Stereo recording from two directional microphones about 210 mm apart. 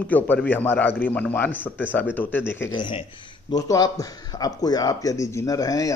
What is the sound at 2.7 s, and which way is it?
Speech, 20° left (ahead or behind).